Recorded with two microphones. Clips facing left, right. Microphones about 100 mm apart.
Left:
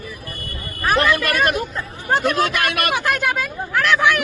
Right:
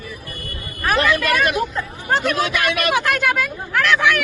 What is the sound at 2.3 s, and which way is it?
Speech, 45° left (ahead or behind).